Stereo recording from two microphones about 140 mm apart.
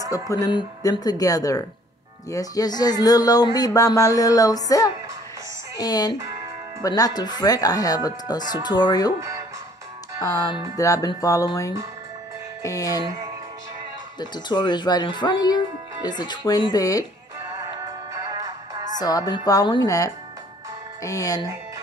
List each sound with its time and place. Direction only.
0.3 s speech: 30° left (ahead or behind)
10.8 s speech: 25° left (ahead or behind)
14.2 s speech: 30° left (ahead or behind)
17.7 s music: 25° right (ahead or behind)
18.9 s speech: 25° left (ahead or behind)